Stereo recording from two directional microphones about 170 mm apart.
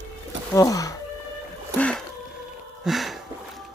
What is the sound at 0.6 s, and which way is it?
Speech, 20° left (ahead or behind).